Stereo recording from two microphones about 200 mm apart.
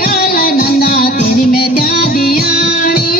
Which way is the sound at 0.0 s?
50° left (ahead or behind).